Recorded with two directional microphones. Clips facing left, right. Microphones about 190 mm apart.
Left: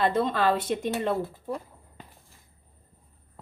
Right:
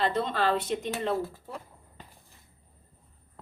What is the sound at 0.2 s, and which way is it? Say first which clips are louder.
Speech: left 3 dB; 50° left (ahead or behind).